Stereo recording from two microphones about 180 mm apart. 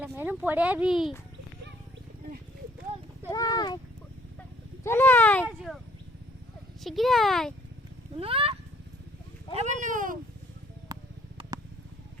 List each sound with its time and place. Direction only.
0.0 s speech: 10° right (ahead or behind)
3.2 s speech: 20° left (ahead or behind)
4.8 s speech: 15° left (ahead or behind)
6.8 s speech: centre (ahead or behind)
8.2 s a sound: 30° right (ahead or behind)
9.5 s speech: 30° left (ahead or behind)
9.8 s speech: 45° right (ahead or behind)
10.9 s a sound: 20° right (ahead or behind)